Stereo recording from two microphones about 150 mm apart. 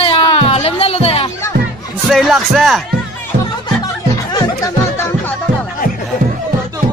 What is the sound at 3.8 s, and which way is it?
Music, 25° left (ahead or behind).